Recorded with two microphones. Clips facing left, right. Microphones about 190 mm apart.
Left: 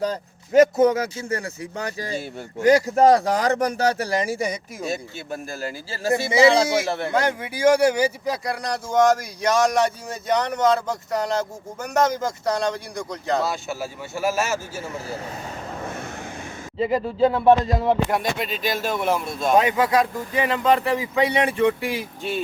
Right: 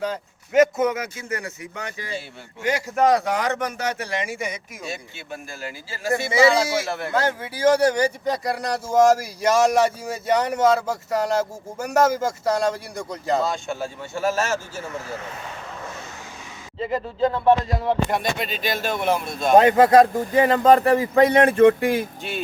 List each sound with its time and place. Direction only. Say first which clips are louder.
0.0 s speech: left 2 dB; 35° left (ahead or behind)
6.1 s speech: left 1 dB; 20° left (ahead or behind); by 13.4 s 5° right (ahead or behind)
13.4 s speech: right 1 dB; 5° left (ahead or behind)
16.8 s speech: left 3 dB; 15° left (ahead or behind)
18.1 s speech: even; 5° left (ahead or behind)
19.5 s a man's voice: right 6 dB; 45° right (ahead or behind)
22.2 s speech: left 3 dB; centre (ahead or behind)